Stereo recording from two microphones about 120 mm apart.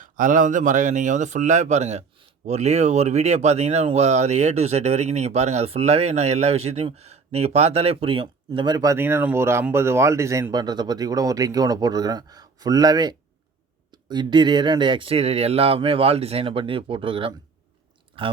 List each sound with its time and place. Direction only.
0.0 s speech: 90° right; by 9.0 s 35° right (ahead or behind)
9.0 s speech: 20° right (ahead or behind); by 18.3 s 45° right (ahead or behind)